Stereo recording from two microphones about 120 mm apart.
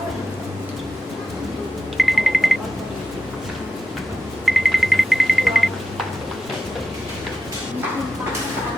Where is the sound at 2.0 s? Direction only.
Centre (ahead or behind).